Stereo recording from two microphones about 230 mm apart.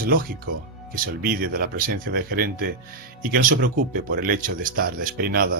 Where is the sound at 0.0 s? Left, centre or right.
Right.